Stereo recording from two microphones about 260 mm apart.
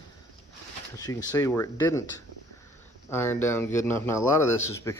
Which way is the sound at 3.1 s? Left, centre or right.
Centre.